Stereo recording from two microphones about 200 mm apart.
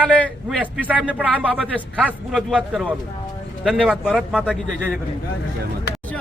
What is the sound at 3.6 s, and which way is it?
Speech, centre (ahead or behind).